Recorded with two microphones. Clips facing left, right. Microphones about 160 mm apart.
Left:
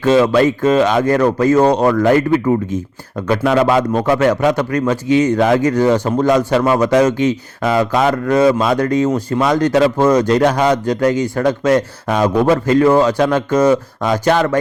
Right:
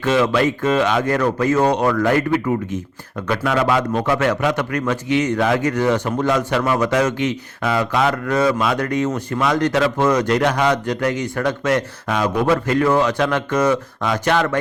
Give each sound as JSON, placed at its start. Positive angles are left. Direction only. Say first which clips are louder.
{"t": 0.0, "sound": "speech", "louder": "left 5 dB", "side_deg": 30}